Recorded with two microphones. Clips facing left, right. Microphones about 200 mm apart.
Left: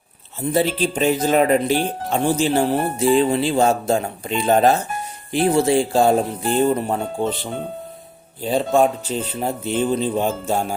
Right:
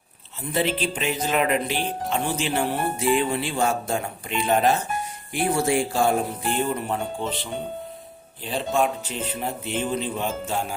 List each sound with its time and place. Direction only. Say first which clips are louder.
0.5 s speech: left 4 dB; 40° left (ahead or behind)
5.3 s speech: left 6 dB; 25° left (ahead or behind); by 7.3 s 45° left (ahead or behind)
8.4 s speech: left 7 dB; 40° left (ahead or behind)